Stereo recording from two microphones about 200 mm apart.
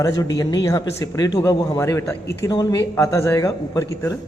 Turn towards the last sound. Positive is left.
turn(degrees=15)  # may be behind; listen again after turning